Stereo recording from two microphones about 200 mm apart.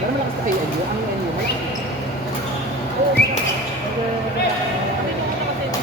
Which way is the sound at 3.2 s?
55° left (ahead or behind).